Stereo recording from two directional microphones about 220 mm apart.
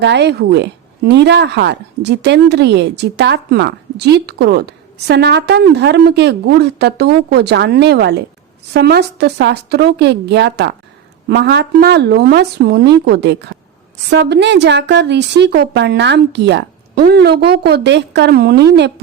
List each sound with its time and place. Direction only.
0.0 s speech: 50° right (ahead or behind)